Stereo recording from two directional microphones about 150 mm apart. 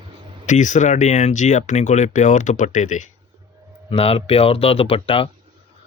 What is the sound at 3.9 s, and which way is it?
Speech, 40° left (ahead or behind).